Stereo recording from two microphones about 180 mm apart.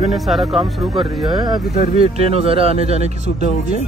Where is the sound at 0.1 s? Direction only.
Centre (ahead or behind).